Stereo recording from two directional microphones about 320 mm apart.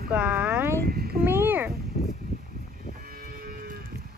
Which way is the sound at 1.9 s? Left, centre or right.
Left.